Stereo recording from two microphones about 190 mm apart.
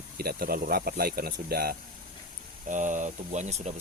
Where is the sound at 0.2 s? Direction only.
55° right (ahead or behind).